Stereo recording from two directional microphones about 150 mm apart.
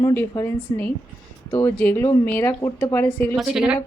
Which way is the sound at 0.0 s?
20° left (ahead or behind).